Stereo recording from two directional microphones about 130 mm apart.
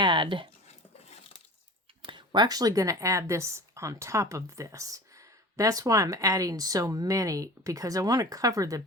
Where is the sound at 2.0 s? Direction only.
35° right (ahead or behind).